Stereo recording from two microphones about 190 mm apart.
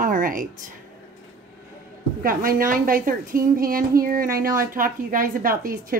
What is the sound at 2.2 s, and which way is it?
A woman's voice, 45° right (ahead or behind).